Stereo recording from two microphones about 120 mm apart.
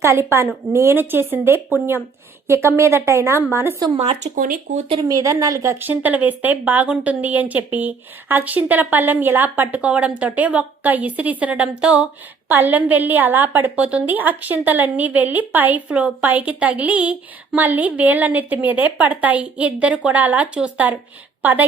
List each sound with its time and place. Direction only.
0.0 s a woman's voice: 25° right (ahead or behind)
3.9 s speech: 60° right (ahead or behind)
5.0 s a woman's voice: 30° right (ahead or behind)
5.8 s a woman's voice: 15° right (ahead or behind)